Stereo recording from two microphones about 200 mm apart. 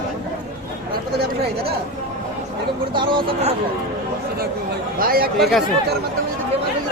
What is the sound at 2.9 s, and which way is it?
Speech, 25° right (ahead or behind).